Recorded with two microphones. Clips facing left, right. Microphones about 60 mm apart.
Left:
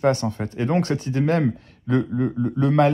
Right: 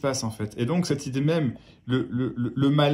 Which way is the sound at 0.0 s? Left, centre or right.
Left.